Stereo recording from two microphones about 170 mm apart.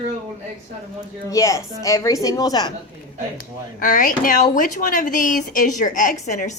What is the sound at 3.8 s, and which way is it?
Speech, 50° left (ahead or behind).